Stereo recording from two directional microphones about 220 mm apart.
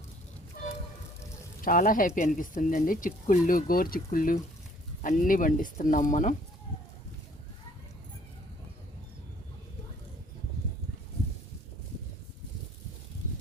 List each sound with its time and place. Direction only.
1.6 s speech: 40° left (ahead or behind)